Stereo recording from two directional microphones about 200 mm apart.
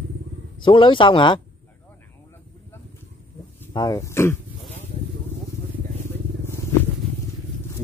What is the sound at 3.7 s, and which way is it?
Speech, 15° left (ahead or behind).